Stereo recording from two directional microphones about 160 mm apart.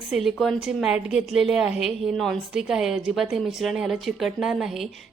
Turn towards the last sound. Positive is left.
turn(degrees=0)  # may be behind; listen again after turning